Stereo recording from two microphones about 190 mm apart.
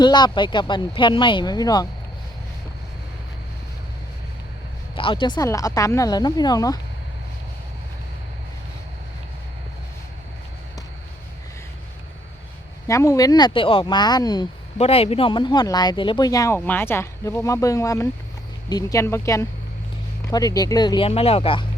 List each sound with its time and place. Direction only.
0.0 s speech: 20° left (ahead or behind)
4.9 s speech: 25° left (ahead or behind)
12.9 s speech: 15° left (ahead or behind)